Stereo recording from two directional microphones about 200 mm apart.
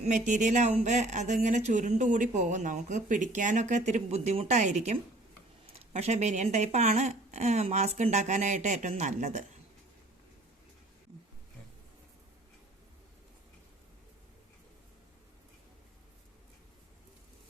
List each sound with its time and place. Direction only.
0.0 s speech: 35° right (ahead or behind)